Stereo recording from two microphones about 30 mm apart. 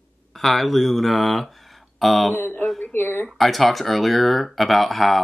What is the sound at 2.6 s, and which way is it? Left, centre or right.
Speech, left.